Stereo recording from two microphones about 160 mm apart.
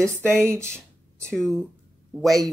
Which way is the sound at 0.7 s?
5° left (ahead or behind).